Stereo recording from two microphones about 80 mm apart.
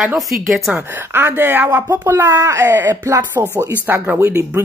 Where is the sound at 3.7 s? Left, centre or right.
Right.